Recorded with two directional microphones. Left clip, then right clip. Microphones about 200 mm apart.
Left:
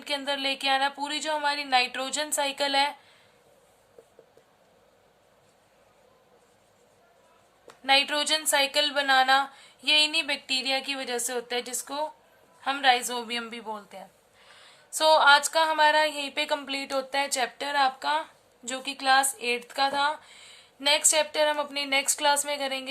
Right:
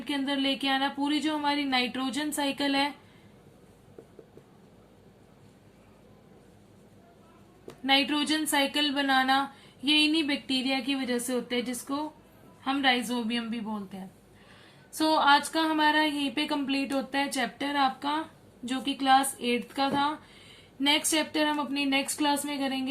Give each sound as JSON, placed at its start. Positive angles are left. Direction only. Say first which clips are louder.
{"t": 0.0, "sound": "a woman's voice", "louder": "left 1 dB", "side_deg": 50}
{"t": 7.9, "sound": "a woman's voice", "louder": "left 2 dB", "side_deg": 50}